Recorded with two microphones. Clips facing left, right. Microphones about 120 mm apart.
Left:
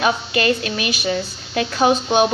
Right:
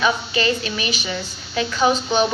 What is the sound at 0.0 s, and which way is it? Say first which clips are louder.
A woman's voice: left 1 dB; 55° left (ahead or behind).